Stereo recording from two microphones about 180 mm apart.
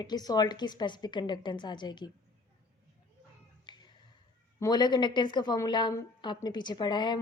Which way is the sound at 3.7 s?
25° left (ahead or behind).